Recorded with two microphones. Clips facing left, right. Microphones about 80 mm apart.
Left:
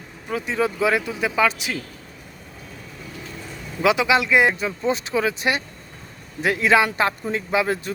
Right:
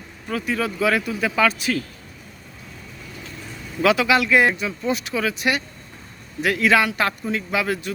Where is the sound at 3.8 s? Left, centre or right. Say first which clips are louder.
Right 1 dB; centre.